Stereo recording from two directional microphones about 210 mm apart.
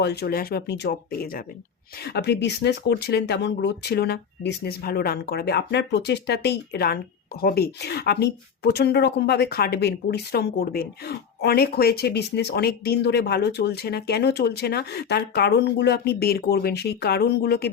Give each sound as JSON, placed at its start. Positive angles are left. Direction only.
{"t": 0.0, "sound": "speech", "side_deg": 50}